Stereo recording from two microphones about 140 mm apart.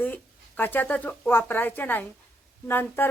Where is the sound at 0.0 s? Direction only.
10° left (ahead or behind).